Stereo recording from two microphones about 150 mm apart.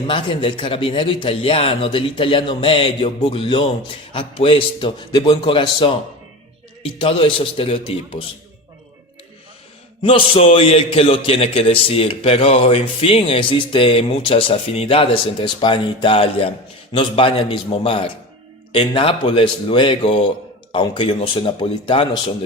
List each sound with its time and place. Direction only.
0.1 s a man's voice: 35° left (ahead or behind)
10.0 s a man's voice: 40° left (ahead or behind)